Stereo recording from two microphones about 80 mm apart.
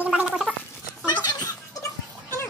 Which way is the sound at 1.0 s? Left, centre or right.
Left.